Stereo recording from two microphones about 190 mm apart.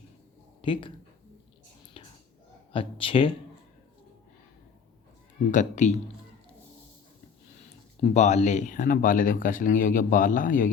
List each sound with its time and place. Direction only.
0.6 s speech: 25° left (ahead or behind)
2.7 s speech: 30° left (ahead or behind)
5.5 s speech: 40° left (ahead or behind)
8.1 s speech: 35° left (ahead or behind)